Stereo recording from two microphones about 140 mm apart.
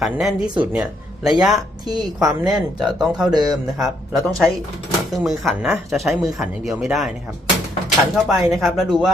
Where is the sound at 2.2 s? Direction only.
30° right (ahead or behind).